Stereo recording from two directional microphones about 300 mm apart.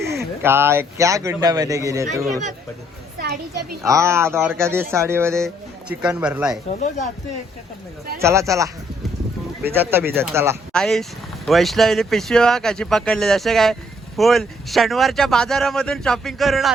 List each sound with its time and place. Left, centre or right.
0.4 s speech: centre
3.8 s speech: centre
6.7 s speech: left
8.2 s speech: centre
10.7 s speech: centre